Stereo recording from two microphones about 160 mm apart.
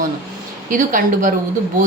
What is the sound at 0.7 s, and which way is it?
Speech, 55° right (ahead or behind).